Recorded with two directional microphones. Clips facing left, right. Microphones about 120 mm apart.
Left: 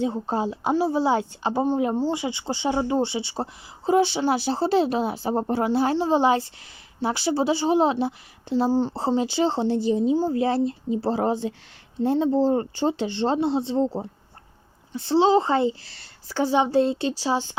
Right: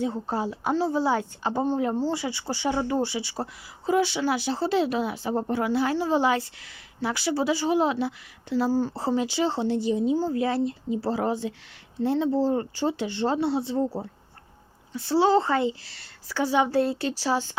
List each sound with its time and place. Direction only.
0.0 s speech: 20° left (ahead or behind)
10.2 s speech: 20° left (ahead or behind)
10.4 s speech: 30° left (ahead or behind)
12.0 s speech: 20° left (ahead or behind)
12.5 s speech: 30° left (ahead or behind)